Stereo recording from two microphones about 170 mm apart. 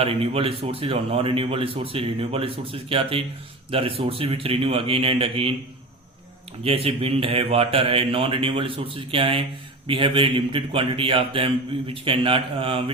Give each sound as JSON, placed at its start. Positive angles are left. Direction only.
{"t": 0.0, "sound": "a man's voice", "side_deg": -35}
{"t": 6.6, "sound": "a man's voice", "side_deg": -35}